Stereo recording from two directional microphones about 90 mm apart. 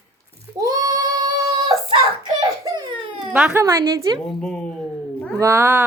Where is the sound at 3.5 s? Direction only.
35° right (ahead or behind).